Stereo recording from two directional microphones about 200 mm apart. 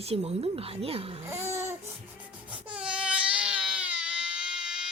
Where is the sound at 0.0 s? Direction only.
30° right (ahead or behind).